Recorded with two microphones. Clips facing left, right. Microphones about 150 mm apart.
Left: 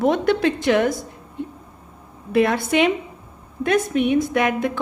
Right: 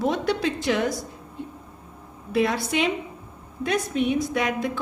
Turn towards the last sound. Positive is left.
turn(degrees=60)  # may be behind; listen again after turning